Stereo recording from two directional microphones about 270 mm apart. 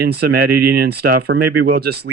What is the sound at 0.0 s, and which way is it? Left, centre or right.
Speech, right.